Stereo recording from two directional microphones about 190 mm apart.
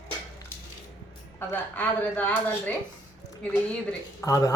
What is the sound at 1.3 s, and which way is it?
A woman's voice, 10° left (ahead or behind).